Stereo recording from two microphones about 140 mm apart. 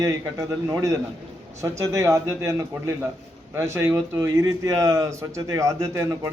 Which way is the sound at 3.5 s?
20° right (ahead or behind).